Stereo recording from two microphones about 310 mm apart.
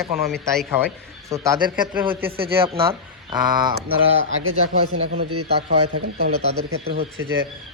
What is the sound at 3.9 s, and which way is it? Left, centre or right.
Speech, right.